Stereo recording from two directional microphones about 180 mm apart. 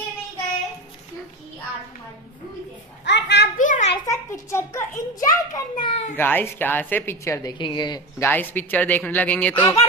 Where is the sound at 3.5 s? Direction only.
45° left (ahead or behind).